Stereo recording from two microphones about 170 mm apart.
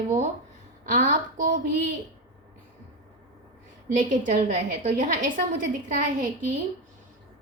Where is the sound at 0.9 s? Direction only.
50° right (ahead or behind).